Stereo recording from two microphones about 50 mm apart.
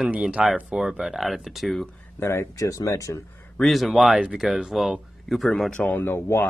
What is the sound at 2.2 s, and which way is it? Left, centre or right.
Speech, left.